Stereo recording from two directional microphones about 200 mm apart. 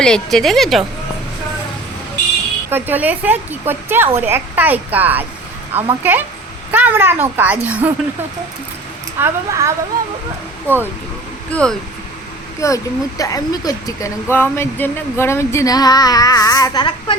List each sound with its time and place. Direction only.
0.0 s speech: 5° left (ahead or behind)
2.6 s speech: 10° right (ahead or behind)
9.1 s speech: 15° right (ahead or behind)
10.7 s speech: 10° left (ahead or behind)